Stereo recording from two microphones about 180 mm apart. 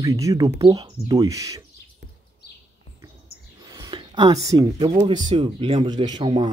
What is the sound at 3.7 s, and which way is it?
Speech, 25° right (ahead or behind).